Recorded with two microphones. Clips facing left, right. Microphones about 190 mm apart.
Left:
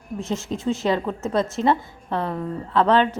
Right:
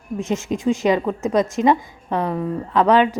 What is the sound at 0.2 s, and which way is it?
A woman's voice, 15° right (ahead or behind).